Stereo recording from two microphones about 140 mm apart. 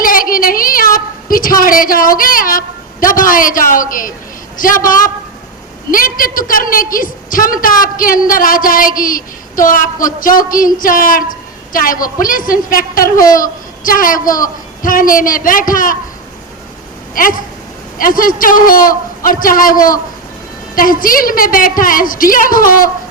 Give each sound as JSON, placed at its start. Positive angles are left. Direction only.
{"t": 0.0, "sound": "a sound", "side_deg": 90}
{"t": 4.5, "sound": "a woman's voice", "side_deg": 75}
{"t": 17.2, "sound": "a woman's voice", "side_deg": 85}